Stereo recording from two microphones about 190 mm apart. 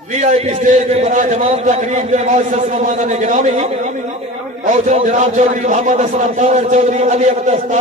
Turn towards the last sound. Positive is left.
turn(degrees=-35)  # may be behind; listen again after turning